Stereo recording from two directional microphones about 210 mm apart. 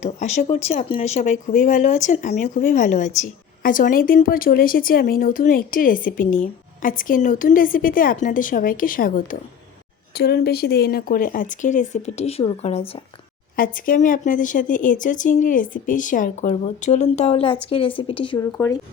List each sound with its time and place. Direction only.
0.0 s speech: 35° left (ahead or behind)
13.6 s speech: 40° left (ahead or behind); by 18.4 s 25° left (ahead or behind)
18.5 s speech: 10° left (ahead or behind)